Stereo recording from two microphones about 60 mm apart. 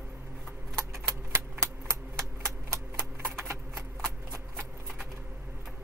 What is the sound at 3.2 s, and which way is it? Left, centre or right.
Clip-clop, right.